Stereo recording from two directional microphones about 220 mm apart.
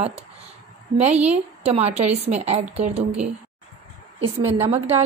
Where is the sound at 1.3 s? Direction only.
30° right (ahead or behind).